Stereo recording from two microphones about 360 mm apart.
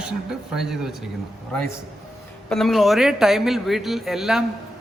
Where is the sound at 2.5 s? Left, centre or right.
Centre.